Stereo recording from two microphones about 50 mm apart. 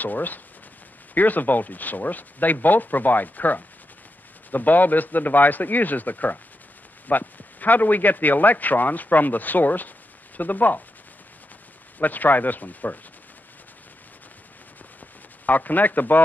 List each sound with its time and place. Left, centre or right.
0.0 s a man's voice: left
12.0 s speech: left
15.4 s speech: left